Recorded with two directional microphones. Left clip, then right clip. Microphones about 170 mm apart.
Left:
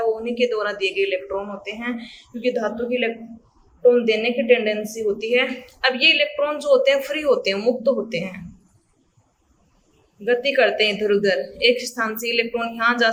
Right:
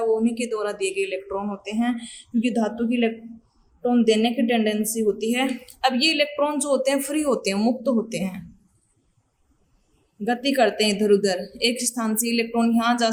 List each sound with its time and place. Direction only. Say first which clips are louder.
0.0 s speech: left 2 dB; 30° right (ahead or behind)
10.2 s speech: left 3 dB; 35° right (ahead or behind)